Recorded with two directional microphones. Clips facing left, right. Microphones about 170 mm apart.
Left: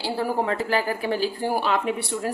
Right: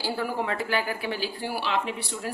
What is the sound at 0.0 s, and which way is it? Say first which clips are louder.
A woman's voice: left 4 dB; 35° left (ahead or behind).